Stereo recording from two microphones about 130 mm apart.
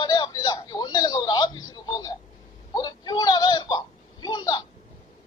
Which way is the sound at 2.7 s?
30° left (ahead or behind).